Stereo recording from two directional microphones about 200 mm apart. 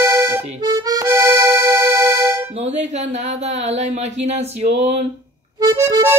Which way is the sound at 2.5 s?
35° right (ahead or behind).